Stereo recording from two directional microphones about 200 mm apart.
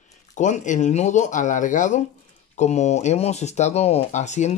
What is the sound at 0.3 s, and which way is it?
Speech, 40° left (ahead or behind).